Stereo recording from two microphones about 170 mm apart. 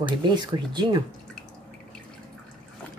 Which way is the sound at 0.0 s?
25° right (ahead or behind).